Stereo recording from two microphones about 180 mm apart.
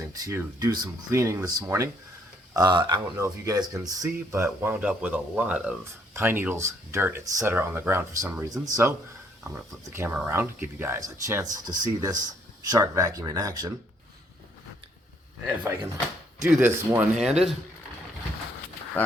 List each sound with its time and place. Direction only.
0.1 s speech: 20° right (ahead or behind)
15.4 s speech: 10° right (ahead or behind)
17.2 s speech: centre (ahead or behind)